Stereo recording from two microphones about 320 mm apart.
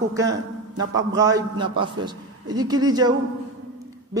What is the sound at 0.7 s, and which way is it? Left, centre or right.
A man's voice, centre.